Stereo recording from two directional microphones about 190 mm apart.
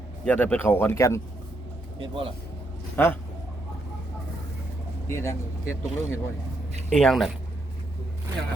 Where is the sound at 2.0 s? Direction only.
25° right (ahead or behind).